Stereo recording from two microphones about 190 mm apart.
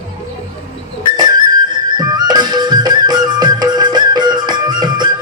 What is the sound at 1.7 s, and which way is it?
Music, 20° right (ahead or behind).